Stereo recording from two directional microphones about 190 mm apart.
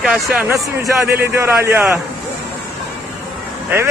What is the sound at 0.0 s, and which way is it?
A man's voice, 5° right (ahead or behind).